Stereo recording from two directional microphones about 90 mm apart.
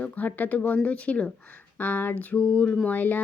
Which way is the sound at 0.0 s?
20° left (ahead or behind).